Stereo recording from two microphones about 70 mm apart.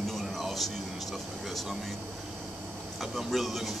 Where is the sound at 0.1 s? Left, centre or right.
Centre.